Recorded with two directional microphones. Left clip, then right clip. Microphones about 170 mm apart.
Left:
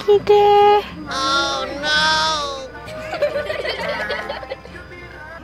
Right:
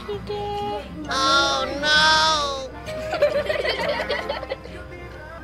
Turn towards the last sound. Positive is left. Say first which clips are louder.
# even
turn(degrees=0)  # may be behind; listen again after turning